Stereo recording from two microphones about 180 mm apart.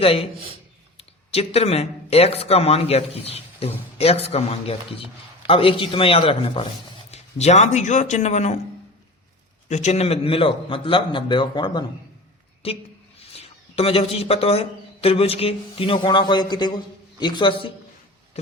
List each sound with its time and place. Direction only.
0.0 s speech: 30° left (ahead or behind)
9.6 s a man's voice: 40° left (ahead or behind)